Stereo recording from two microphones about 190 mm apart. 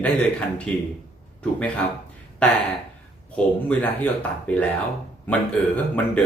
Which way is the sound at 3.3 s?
10° left (ahead or behind).